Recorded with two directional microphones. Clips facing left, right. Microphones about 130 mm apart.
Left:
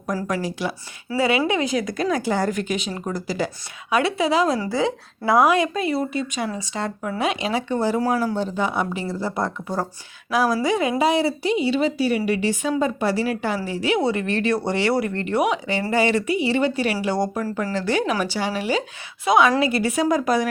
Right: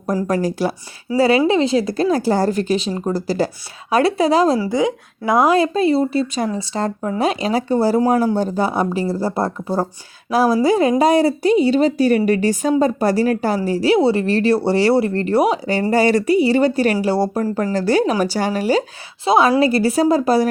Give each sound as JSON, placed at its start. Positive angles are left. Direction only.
{"t": 0.3, "sound": "speech", "side_deg": -40}
{"t": 4.6, "sound": "a woman's voice", "side_deg": -15}
{"t": 5.5, "sound": "speech", "side_deg": -30}
{"t": 19.2, "sound": "speech", "side_deg": -30}